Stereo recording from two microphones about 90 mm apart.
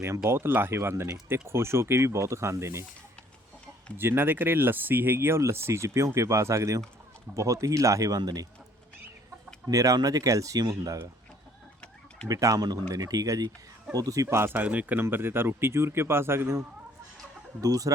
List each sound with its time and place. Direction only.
0.3 s speech: 25° right (ahead or behind)
3.9 s speech: 25° right (ahead or behind); by 8.4 s 45° right (ahead or behind)
9.6 s speech: 40° right (ahead or behind)
12.3 s speech: 40° right (ahead or behind)
17.6 s speech: 40° right (ahead or behind)